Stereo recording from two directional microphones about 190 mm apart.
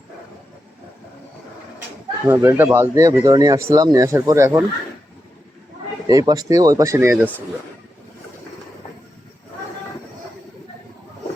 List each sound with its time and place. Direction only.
2.2 s speech: 10° right (ahead or behind)
6.1 s speech: 20° right (ahead or behind)